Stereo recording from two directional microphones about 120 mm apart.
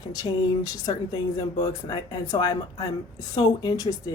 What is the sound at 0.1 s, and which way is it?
Speech, 30° left (ahead or behind).